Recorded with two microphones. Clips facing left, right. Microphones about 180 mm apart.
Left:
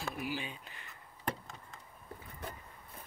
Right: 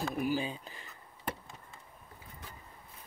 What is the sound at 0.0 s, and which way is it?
Speech, 45° right (ahead or behind).